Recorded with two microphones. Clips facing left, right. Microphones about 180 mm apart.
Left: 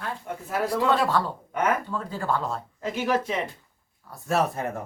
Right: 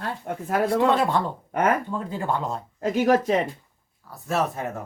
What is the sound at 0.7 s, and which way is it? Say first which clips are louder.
Speech: right 1 dB; 20° right (ahead or behind).